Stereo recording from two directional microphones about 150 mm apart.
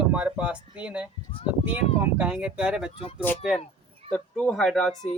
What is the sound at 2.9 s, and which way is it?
Speech, 40° left (ahead or behind).